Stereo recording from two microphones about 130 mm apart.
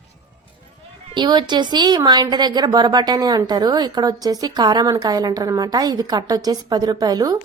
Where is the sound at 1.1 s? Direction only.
35° right (ahead or behind).